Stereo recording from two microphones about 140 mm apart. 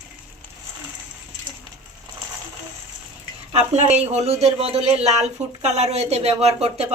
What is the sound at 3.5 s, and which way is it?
Speech, 50° right (ahead or behind).